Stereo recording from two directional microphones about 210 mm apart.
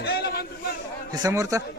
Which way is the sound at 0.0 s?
50° left (ahead or behind).